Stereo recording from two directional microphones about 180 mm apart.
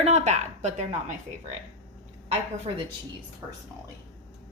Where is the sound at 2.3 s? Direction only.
35° right (ahead or behind).